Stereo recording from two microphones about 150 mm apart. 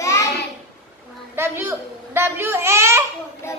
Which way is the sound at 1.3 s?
15° right (ahead or behind).